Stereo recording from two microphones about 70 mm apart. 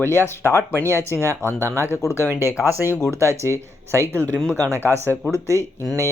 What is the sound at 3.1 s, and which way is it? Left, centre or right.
Speech, right.